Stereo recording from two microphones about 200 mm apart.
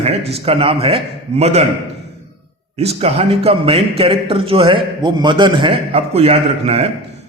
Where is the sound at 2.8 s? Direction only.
30° right (ahead or behind).